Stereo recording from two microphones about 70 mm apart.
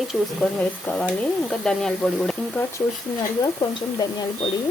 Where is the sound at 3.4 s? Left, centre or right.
Left.